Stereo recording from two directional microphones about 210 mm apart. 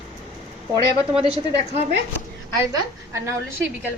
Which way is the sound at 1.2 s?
30° right (ahead or behind).